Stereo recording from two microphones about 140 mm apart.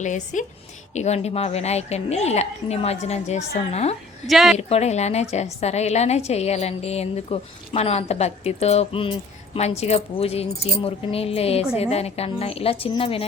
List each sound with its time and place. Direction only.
0.0 s a woman's voice: 60° left (ahead or behind)
4.3 s a woman's voice: centre (ahead or behind)
4.5 s a woman's voice: 50° left (ahead or behind)
9.6 s a woman's voice: 50° left (ahead or behind)